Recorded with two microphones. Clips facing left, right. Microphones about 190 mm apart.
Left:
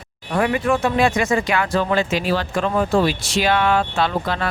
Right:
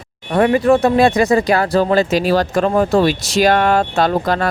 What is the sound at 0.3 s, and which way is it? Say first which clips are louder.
Speech: right 7 dB; 35° right (ahead or behind).